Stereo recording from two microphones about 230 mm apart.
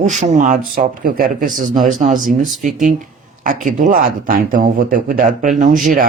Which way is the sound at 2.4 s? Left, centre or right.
Centre.